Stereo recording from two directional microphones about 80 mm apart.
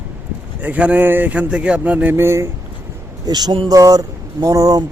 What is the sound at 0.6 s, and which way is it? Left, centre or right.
Speech, centre.